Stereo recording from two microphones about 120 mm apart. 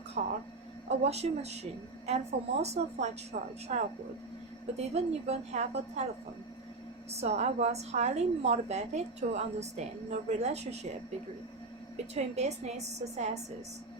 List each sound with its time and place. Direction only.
0.2 s a sound: 90° right
0.9 s a woman's voice: 60° right (ahead or behind)
3.3 s speech: 90° right
3.7 s a woman's voice: 70° right (ahead or behind)
7.1 s a woman's voice: 65° right (ahead or behind)
12.1 s a woman's voice: 65° right (ahead or behind)